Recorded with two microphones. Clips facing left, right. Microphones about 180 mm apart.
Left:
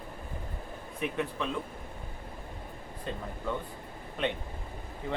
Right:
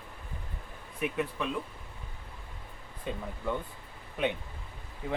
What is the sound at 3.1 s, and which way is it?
Speech, 10° right (ahead or behind).